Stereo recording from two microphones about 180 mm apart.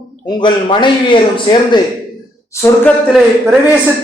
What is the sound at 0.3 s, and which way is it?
A man's voice, 25° left (ahead or behind).